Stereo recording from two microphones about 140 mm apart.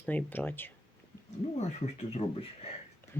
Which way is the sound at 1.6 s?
55° left (ahead or behind).